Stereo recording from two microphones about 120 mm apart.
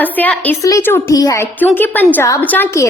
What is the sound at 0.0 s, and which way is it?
A woman's voice, 15° left (ahead or behind).